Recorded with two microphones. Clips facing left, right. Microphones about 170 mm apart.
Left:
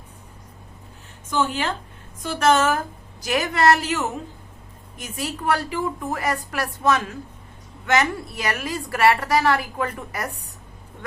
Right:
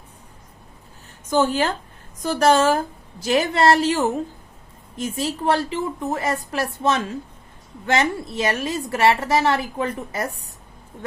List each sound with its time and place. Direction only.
1.3 s a woman's voice: 40° right (ahead or behind)